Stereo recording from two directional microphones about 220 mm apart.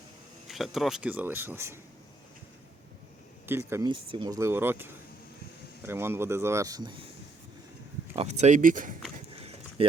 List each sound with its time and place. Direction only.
0.4 s speech: centre (ahead or behind)
3.4 s speech: 10° right (ahead or behind)
8.1 s speech: 30° right (ahead or behind)